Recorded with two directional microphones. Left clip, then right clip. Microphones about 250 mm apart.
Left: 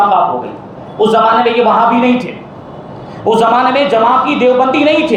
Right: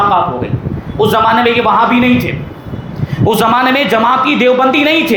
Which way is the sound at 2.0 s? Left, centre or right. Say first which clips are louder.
Even; right.